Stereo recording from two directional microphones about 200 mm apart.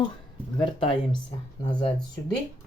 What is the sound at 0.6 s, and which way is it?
Speech, 25° left (ahead or behind).